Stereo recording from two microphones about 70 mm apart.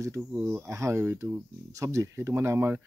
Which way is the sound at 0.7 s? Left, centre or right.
Right.